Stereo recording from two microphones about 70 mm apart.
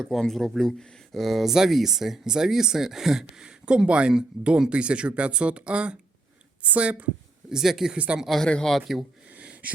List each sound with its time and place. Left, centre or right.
0.0 s a woman's voice: centre
7.5 s speech: centre
7.9 s a woman's voice: centre
8.2 s a man's voice: centre
9.3 s a sound: centre